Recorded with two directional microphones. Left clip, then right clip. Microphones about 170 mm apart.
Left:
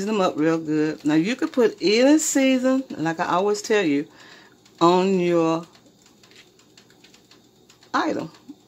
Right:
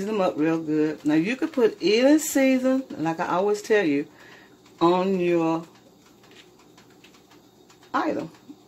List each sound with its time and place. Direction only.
0.0 s speech: 25° left (ahead or behind)
7.9 s speech: 25° left (ahead or behind)